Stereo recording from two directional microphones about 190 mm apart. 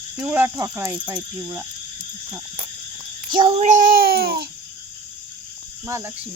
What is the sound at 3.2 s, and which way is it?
Child singing, 25° right (ahead or behind).